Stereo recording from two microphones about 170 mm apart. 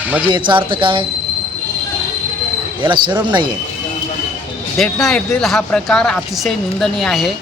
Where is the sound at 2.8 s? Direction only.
25° right (ahead or behind).